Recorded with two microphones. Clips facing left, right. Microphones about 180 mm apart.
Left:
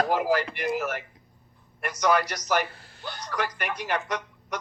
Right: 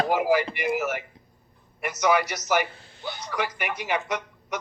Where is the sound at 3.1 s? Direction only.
10° right (ahead or behind).